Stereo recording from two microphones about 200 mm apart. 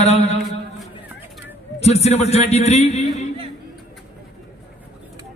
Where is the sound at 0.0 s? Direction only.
35° left (ahead or behind).